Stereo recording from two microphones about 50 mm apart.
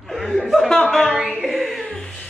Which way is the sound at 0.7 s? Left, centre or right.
Centre.